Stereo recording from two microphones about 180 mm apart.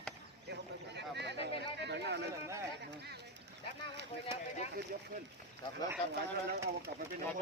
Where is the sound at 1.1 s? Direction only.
70° right (ahead or behind).